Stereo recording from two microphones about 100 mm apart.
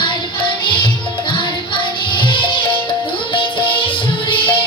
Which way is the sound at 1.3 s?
55° left (ahead or behind).